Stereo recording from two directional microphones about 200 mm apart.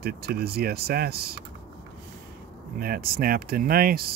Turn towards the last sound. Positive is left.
turn(degrees=-50)  # may be behind; listen again after turning